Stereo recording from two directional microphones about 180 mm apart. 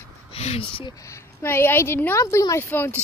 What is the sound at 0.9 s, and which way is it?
A woman's voice, 15° left (ahead or behind).